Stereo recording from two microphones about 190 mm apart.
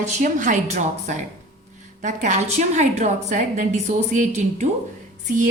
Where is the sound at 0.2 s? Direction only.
40° right (ahead or behind).